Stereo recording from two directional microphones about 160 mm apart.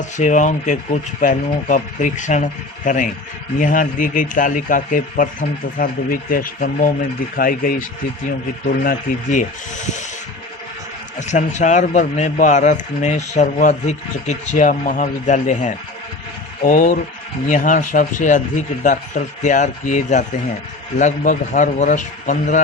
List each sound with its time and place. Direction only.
0.0 s speech: 50° left (ahead or behind)
11.2 s speech: 50° left (ahead or behind)